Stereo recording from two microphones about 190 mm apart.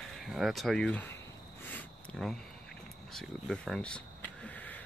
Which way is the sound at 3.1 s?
Centre (ahead or behind).